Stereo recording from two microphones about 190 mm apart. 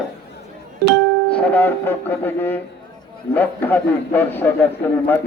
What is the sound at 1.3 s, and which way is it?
A man's voice, 10° left (ahead or behind).